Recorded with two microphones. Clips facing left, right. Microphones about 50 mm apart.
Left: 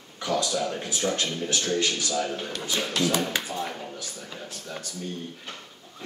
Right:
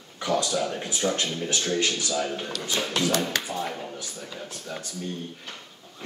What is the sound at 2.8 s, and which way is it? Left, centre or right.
Speech, centre.